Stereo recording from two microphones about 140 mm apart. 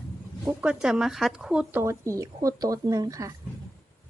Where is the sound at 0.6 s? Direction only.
5° right (ahead or behind); by 3.3 s 25° right (ahead or behind).